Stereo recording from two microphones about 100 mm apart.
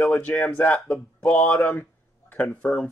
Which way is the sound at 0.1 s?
15° left (ahead or behind).